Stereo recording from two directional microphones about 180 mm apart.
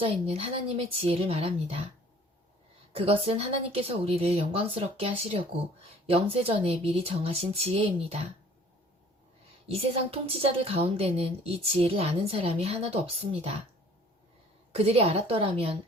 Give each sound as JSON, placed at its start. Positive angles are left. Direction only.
{"t": 0.0, "sound": "a woman's voice", "side_deg": -35}
{"t": 2.9, "sound": "a woman's voice", "side_deg": -30}
{"t": 9.6, "sound": "a woman's voice", "side_deg": -35}
{"t": 14.8, "sound": "a woman's voice", "side_deg": -35}